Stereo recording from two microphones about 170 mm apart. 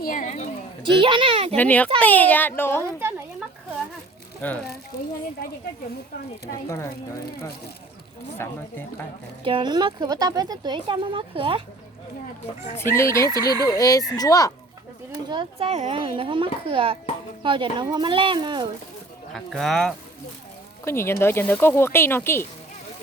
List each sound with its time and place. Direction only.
0.0 s speech: 55° left (ahead or behind)
0.8 s a child's voice: 30° right (ahead or behind)
1.5 s speech: 10° left (ahead or behind)
2.8 s a sound: 15° right (ahead or behind)
4.4 s speech: 10° left (ahead or behind)
6.7 s speech: 15° left (ahead or behind)
8.4 s speech: 15° left (ahead or behind)
9.4 s speech: 30° right (ahead or behind)
12.7 s speech: 15° left (ahead or behind)
15.3 s a child's voice: 30° right (ahead or behind)
19.3 s speech: centre (ahead or behind)
20.8 s speech: 15° left (ahead or behind)